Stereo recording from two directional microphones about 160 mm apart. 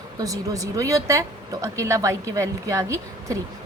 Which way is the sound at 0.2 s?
20° right (ahead or behind).